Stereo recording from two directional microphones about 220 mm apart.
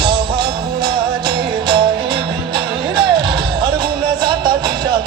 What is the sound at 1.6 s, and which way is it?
Music, 20° right (ahead or behind).